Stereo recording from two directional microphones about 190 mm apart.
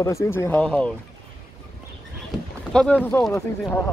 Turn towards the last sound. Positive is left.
turn(degrees=5)  # may be behind; listen again after turning